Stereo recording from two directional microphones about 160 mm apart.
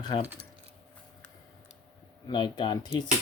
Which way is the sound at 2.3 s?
30° left (ahead or behind).